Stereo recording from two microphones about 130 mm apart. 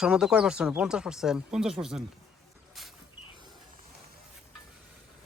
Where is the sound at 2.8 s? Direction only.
Centre (ahead or behind).